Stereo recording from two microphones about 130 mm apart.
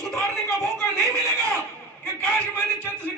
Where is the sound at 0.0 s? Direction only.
Centre (ahead or behind).